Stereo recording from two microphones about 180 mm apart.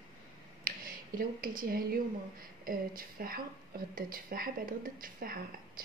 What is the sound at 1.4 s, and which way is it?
A woman's voice, 50° right (ahead or behind).